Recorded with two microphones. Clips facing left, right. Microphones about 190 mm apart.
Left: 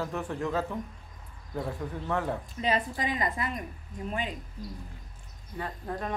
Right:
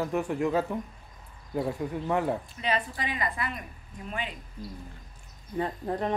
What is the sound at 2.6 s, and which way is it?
A woman's voice, 40° left (ahead or behind).